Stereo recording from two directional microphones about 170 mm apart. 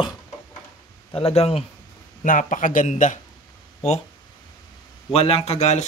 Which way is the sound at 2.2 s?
50° left (ahead or behind).